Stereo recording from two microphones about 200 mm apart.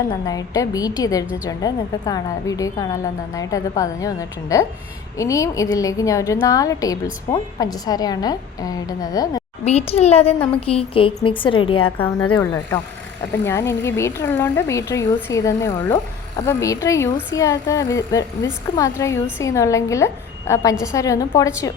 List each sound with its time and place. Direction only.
0.1 s a woman's voice: 20° left (ahead or behind)
9.6 s a woman's voice: 30° left (ahead or behind)
13.3 s a woman's voice: 15° left (ahead or behind)